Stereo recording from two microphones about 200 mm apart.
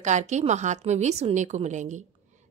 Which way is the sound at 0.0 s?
35° right (ahead or behind).